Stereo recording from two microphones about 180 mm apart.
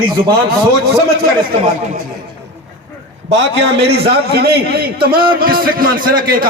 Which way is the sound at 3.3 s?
75° right (ahead or behind).